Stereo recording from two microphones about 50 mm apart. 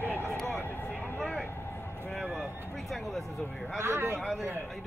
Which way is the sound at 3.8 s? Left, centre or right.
Right.